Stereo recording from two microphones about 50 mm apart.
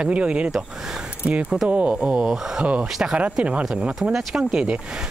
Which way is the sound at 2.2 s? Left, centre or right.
Centre.